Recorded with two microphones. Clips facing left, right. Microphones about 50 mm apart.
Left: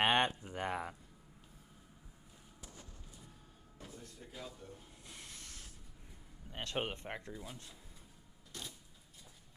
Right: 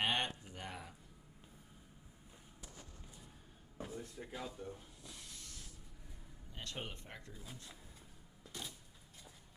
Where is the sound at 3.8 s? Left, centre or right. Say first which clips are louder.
Right 6 dB; right.